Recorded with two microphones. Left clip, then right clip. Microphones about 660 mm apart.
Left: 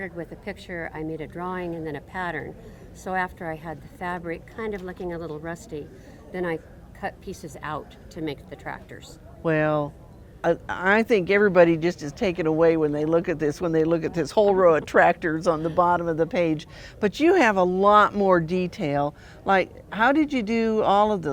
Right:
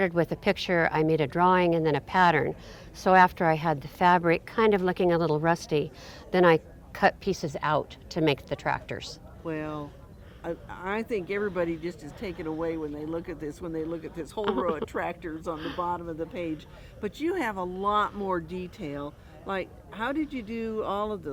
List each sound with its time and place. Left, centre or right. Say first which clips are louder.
0.0 s speech: right 9 dB; right
9.4 s speech: left 12 dB; left